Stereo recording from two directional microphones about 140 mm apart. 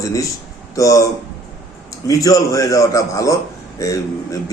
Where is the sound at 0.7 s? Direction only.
25° left (ahead or behind).